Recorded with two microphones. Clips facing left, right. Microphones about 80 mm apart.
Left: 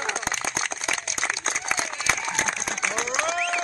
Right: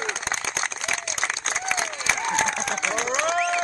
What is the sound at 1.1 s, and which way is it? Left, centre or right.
Applause, centre.